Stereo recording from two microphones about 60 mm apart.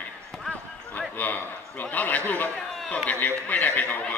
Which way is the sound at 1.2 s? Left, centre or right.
Left.